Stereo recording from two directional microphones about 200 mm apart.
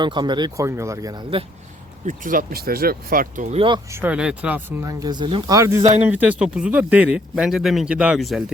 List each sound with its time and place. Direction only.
0.0 s speech: 20° right (ahead or behind)
2.0 s speech: 40° right (ahead or behind)
3.9 s speech: 5° right (ahead or behind)